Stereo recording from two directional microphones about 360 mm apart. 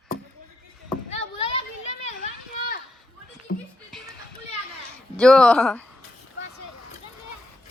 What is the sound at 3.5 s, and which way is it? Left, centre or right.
Music, left.